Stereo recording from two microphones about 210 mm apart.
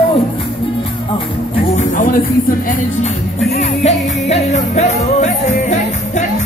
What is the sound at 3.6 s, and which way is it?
Music, 30° left (ahead or behind).